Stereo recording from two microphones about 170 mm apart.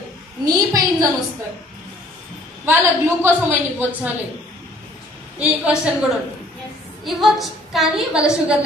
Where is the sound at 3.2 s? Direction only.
10° right (ahead or behind).